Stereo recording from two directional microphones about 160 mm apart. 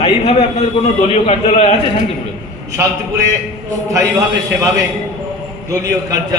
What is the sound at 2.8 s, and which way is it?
Speech, 15° right (ahead or behind).